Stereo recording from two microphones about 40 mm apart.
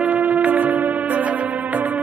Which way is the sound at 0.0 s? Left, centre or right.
Right.